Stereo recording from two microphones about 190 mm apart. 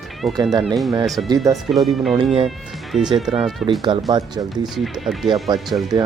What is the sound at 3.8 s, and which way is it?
Speech, 25° right (ahead or behind).